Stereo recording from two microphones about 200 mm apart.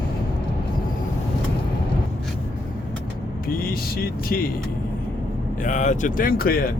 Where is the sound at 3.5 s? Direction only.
45° left (ahead or behind).